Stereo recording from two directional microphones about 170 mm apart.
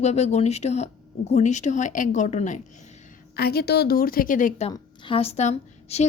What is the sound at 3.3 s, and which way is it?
A woman's voice, 70° left (ahead or behind).